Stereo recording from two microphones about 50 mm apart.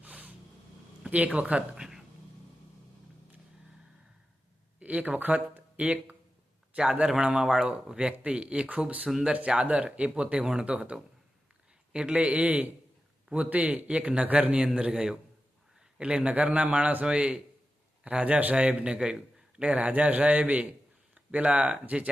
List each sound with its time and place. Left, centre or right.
0.0 s a sound: right
1.0 s speech: right
1.7 s a sound: centre
4.8 s speech: right
7.1 s speech: centre
9.0 s speech: centre
9.5 s speech: centre
11.9 s speech: right